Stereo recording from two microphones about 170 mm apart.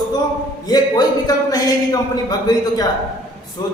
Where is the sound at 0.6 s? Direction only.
25° left (ahead or behind).